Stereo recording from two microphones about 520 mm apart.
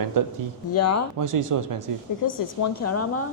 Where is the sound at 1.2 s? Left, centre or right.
Right.